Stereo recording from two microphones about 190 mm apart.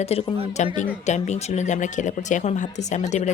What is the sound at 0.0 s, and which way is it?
Speech, 30° left (ahead or behind).